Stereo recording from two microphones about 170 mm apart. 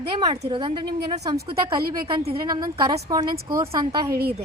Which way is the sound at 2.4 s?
25° right (ahead or behind).